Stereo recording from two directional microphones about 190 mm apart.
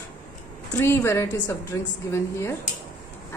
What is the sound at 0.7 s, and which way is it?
A woman's voice, 15° left (ahead or behind).